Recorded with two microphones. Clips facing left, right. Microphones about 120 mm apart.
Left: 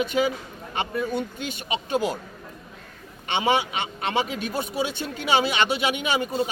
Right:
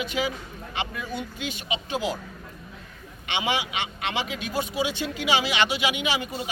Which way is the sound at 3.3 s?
45° left (ahead or behind).